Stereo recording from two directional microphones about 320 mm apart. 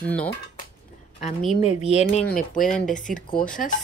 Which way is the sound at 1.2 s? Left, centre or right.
Centre.